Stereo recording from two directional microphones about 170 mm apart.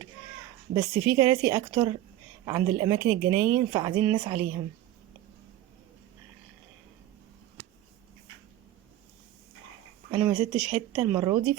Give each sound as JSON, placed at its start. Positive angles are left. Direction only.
{"t": 1.0, "sound": "a woman's voice", "side_deg": -20}
{"t": 10.2, "sound": "speech", "side_deg": -10}